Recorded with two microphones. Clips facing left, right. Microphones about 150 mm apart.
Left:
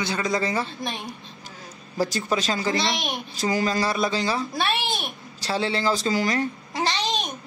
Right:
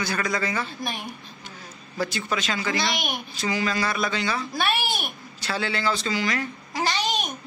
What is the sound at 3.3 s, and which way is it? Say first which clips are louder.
A man's voice: left 3 dB; 45° left (ahead or behind).